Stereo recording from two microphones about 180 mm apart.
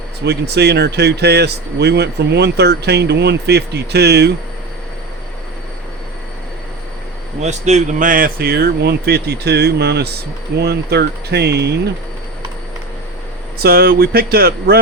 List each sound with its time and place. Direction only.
0.3 s speech: 65° right (ahead or behind)
7.4 s speech: 40° right (ahead or behind); by 11.7 s 65° right (ahead or behind)
13.6 s speech: 60° right (ahead or behind)